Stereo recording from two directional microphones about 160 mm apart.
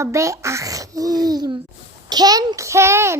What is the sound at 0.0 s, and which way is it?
A child's voice, 20° right (ahead or behind).